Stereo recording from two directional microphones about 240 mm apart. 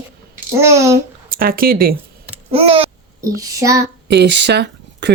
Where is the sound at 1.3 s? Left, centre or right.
Right.